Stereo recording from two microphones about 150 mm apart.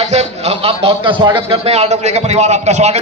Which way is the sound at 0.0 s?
45° right (ahead or behind).